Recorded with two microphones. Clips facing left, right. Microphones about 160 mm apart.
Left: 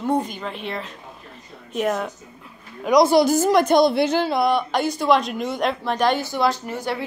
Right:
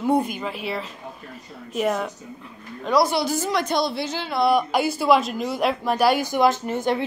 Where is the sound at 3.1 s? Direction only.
45° left (ahead or behind).